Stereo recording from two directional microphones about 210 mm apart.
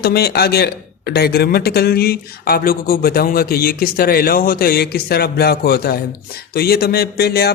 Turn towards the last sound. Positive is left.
turn(degrees=50)  # may be behind; listen again after turning